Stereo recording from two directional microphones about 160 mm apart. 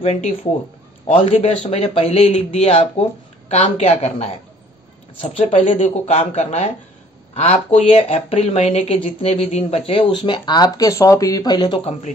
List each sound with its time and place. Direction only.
0.0 s speech: 35° left (ahead or behind)